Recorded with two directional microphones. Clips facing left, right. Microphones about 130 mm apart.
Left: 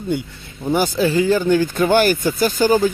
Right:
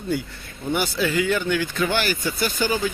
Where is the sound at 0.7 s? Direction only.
40° left (ahead or behind).